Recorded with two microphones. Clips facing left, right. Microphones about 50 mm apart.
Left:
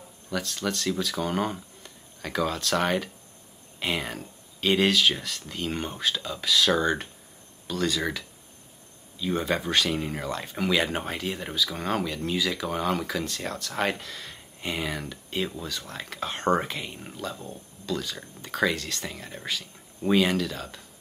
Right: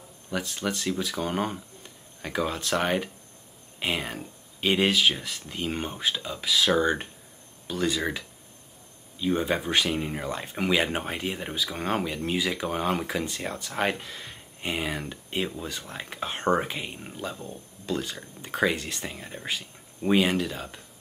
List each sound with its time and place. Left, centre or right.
0.3 s speech: centre